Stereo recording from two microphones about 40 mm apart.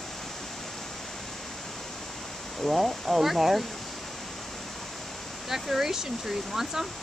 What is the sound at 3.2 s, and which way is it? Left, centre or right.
Speech, centre.